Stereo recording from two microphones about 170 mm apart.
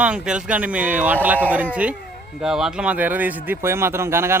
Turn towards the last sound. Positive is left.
turn(degrees=-15)  # may be behind; listen again after turning